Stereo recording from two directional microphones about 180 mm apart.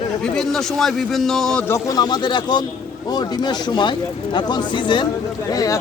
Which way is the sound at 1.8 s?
20° left (ahead or behind).